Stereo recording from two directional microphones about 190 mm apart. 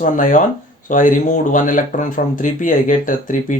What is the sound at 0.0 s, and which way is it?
Speech, 45° left (ahead or behind).